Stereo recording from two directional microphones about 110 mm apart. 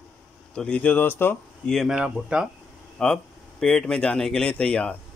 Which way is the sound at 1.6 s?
Centre (ahead or behind).